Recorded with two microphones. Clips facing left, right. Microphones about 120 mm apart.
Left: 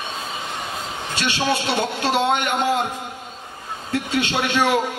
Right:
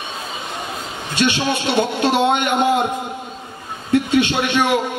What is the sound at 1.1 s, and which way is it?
A man's voice, 20° right (ahead or behind).